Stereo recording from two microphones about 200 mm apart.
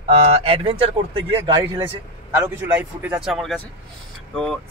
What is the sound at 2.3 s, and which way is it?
A man's voice, 10° right (ahead or behind).